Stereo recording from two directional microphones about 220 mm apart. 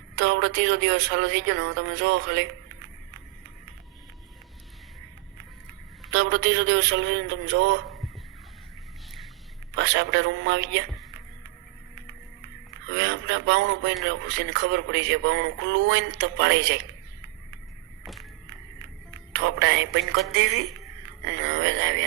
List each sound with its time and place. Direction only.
0.2 s speech: 55° right (ahead or behind)
6.1 s speech: 55° right (ahead or behind)
9.7 s speech: 55° right (ahead or behind)
12.9 s speech: 55° right (ahead or behind)
18.0 s music: centre (ahead or behind)
19.3 s speech: 55° right (ahead or behind)
21.4 s speech: 55° right (ahead or behind)